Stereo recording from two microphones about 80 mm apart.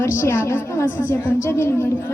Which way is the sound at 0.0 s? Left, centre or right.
Left.